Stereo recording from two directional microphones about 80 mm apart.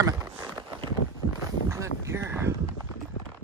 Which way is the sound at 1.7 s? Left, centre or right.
Right.